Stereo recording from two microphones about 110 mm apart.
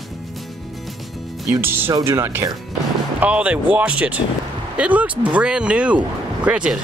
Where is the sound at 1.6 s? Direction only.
20° right (ahead or behind).